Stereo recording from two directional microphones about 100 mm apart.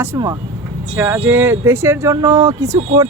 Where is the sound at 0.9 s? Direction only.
20° right (ahead or behind).